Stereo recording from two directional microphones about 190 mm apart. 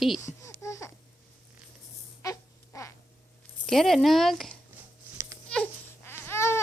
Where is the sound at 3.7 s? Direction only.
Centre (ahead or behind).